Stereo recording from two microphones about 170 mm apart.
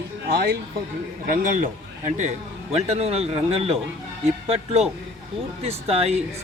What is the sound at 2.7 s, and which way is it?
Speech, 40° right (ahead or behind).